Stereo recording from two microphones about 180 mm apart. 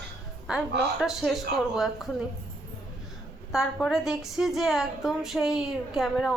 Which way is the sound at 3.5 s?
Centre (ahead or behind).